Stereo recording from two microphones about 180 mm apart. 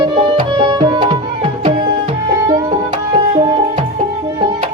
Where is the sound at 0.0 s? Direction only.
30° right (ahead or behind).